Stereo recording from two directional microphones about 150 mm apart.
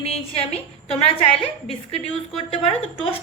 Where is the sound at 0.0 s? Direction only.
40° left (ahead or behind).